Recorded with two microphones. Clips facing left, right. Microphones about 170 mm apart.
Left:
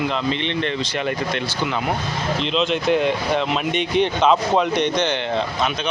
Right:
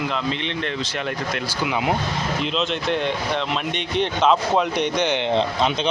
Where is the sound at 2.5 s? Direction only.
Centre (ahead or behind).